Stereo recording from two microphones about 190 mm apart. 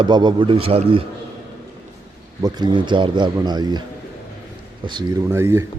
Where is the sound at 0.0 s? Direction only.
25° right (ahead or behind).